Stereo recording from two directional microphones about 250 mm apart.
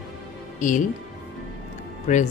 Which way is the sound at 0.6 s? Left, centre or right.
Left.